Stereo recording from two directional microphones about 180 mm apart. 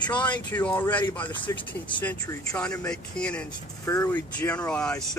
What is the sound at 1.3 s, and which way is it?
Speech, 25° left (ahead or behind).